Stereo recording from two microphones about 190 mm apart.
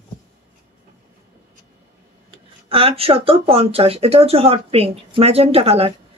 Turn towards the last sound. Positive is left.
turn(degrees=-30)  # may be behind; listen again after turning